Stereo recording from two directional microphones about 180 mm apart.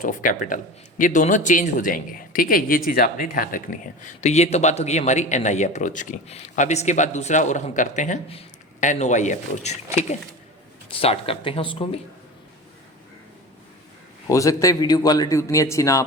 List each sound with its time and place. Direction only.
0.0 s a man's voice: 50° left (ahead or behind)
4.0 s speech: 40° left (ahead or behind)
14.3 s a man's voice: 20° left (ahead or behind)